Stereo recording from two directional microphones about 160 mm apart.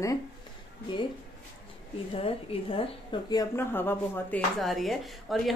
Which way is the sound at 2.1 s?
35° left (ahead or behind).